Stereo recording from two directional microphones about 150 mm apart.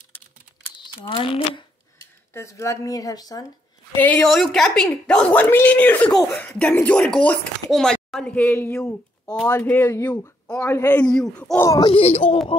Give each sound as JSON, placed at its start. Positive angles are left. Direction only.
{"t": 1.0, "sound": "speech", "side_deg": 35}
{"t": 2.0, "sound": "speech", "side_deg": 20}
{"t": 3.9, "sound": "speech", "side_deg": 10}
{"t": 11.1, "sound": "speech", "side_deg": 5}
{"t": 11.6, "sound": "speech", "side_deg": 20}
{"t": 11.9, "sound": "speech", "side_deg": 40}